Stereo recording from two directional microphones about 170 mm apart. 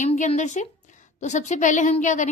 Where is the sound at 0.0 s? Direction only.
45° left (ahead or behind).